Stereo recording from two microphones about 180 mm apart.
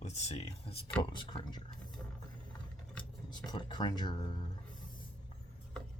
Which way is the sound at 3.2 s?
25° left (ahead or behind).